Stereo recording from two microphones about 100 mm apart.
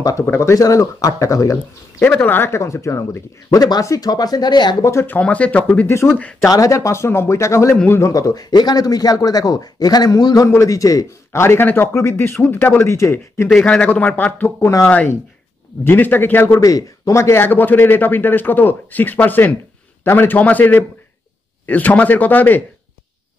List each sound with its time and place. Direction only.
0.0 s speech: 30° left (ahead or behind)
2.0 s a man's voice: 20° left (ahead or behind)
3.6 s speech: 40° left (ahead or behind)
5.0 s a man's voice: 15° left (ahead or behind)
7.7 s speech: 15° left (ahead or behind)
8.0 s speech: 35° left (ahead or behind)
13.5 s speech: 10° left (ahead or behind)
14.6 s speech: 30° left (ahead or behind)
15.8 s a man's voice: 20° left (ahead or behind)
16.5 s a man's voice: 35° left (ahead or behind); by 22.6 s 15° left (ahead or behind)